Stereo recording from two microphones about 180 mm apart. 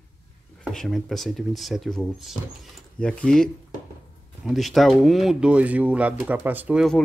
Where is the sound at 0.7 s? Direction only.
Centre (ahead or behind).